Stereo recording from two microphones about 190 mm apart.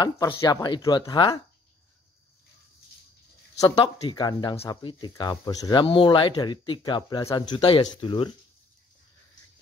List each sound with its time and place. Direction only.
0.0 s speech: 20° left (ahead or behind)
3.5 s speech: 20° left (ahead or behind)